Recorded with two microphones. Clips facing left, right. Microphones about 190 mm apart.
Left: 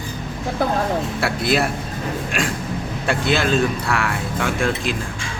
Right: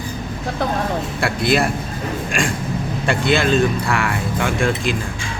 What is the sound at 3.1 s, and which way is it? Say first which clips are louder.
Speech: right 2 dB; centre (ahead or behind).